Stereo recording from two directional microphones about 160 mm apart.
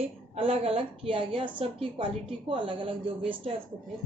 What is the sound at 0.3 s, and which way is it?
A woman's voice, 40° right (ahead or behind).